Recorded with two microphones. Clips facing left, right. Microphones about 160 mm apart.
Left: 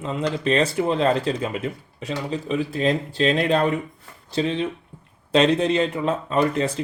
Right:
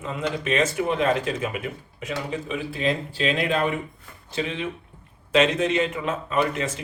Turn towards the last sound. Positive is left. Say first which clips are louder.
# left 3 dB
turn(degrees=35)  # may be behind; listen again after turning